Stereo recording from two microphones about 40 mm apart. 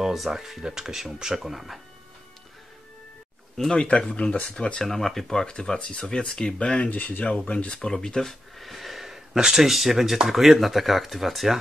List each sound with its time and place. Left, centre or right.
0.0 s speech: centre
3.7 s speech: left
4.8 s speech: centre
6.4 s speech: left
6.9 s speech: left
7.9 s speech: centre
8.3 s speech: centre